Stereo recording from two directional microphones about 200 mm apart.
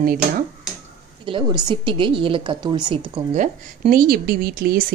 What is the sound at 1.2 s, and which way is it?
Speech, 25° right (ahead or behind).